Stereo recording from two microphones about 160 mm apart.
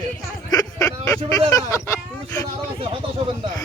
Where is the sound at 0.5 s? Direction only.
20° left (ahead or behind).